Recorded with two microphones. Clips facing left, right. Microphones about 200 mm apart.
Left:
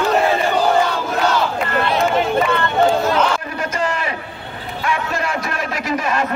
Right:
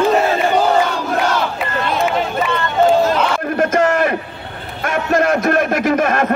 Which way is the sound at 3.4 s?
50° right (ahead or behind).